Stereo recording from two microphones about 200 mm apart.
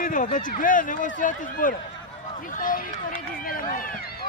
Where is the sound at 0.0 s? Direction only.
40° left (ahead or behind).